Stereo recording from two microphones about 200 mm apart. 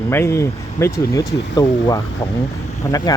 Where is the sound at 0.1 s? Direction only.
15° left (ahead or behind).